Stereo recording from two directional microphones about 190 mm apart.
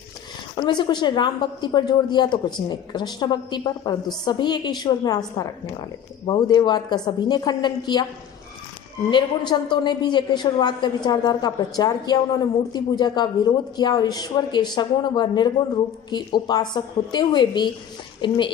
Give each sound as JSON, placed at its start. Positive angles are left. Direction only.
{"t": 0.5, "sound": "a woman's voice", "side_deg": 25}
{"t": 9.0, "sound": "a woman's voice", "side_deg": 25}